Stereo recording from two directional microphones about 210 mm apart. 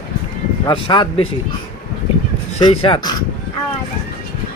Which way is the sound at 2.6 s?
25° left (ahead or behind).